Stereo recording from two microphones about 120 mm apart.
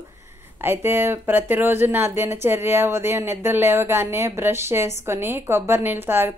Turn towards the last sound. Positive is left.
turn(degrees=-20)  # may be behind; listen again after turning